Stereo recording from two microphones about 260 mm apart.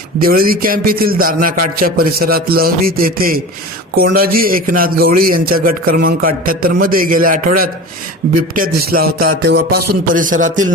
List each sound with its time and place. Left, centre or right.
0.2 s a man's voice: right
8.8 s a man's voice: right